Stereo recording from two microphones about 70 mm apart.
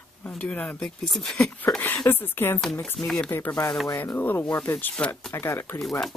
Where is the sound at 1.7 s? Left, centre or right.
Left.